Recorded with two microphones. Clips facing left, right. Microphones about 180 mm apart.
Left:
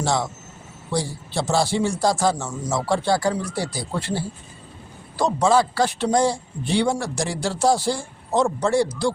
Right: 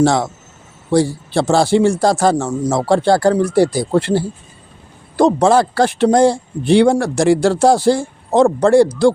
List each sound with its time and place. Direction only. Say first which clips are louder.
0.0 s a man's voice: right 9 dB; 60° right (ahead or behind)